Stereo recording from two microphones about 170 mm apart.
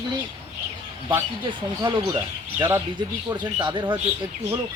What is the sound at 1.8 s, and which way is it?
Speech, 25° right (ahead or behind).